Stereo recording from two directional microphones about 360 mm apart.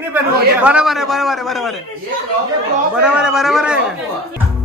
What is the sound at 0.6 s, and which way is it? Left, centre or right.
A man's voice, centre.